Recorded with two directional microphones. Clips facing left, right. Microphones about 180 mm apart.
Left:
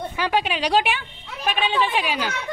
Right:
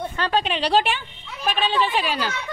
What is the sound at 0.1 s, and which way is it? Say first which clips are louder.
A woman's voice: left 1 dB; 10° left (ahead or behind).